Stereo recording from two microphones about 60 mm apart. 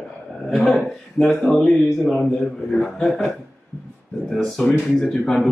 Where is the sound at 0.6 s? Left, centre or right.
Centre.